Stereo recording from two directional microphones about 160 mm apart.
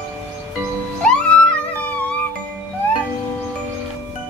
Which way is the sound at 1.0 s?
5° left (ahead or behind).